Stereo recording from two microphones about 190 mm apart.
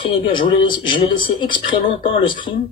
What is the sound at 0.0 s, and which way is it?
Speech, 25° left (ahead or behind).